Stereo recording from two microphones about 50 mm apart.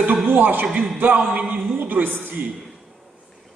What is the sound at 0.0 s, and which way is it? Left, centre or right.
Speech, right.